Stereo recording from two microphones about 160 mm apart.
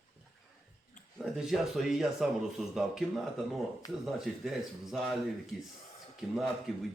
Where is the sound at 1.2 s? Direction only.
5° right (ahead or behind).